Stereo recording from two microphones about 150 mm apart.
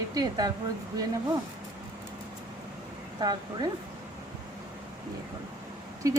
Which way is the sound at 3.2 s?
30° right (ahead or behind).